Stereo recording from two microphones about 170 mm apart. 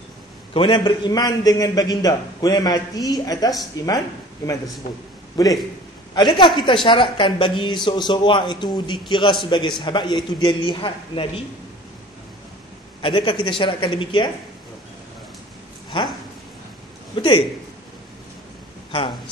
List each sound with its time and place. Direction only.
0.5 s a man's voice: 30° left (ahead or behind)
5.4 s a man's voice: 20° left (ahead or behind)
13.0 s a man's voice: 30° left (ahead or behind)
15.9 s a man's voice: 30° left (ahead or behind)
18.9 s speech: 30° left (ahead or behind)